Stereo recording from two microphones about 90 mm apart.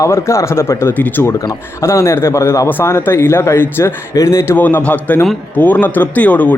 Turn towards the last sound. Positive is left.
turn(degrees=15)  # may be behind; listen again after turning